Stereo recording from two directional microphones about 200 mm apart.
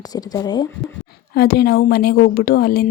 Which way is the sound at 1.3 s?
50° left (ahead or behind).